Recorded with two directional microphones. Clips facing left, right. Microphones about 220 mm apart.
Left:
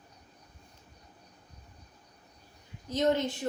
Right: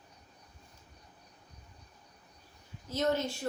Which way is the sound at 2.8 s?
20° left (ahead or behind).